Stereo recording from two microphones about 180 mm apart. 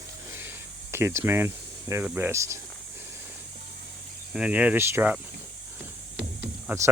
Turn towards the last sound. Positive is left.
turn(degrees=-15)  # may be behind; listen again after turning